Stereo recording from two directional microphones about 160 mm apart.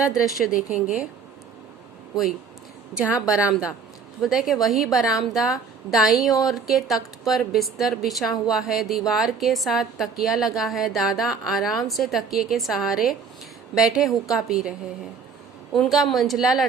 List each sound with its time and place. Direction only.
0.5 s a woman's voice: 5° right (ahead or behind)
3.0 s a woman's voice: 5° right (ahead or behind)
15.7 s a woman's voice: centre (ahead or behind)